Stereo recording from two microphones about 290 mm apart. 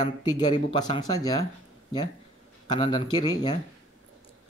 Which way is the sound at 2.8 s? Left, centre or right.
Centre.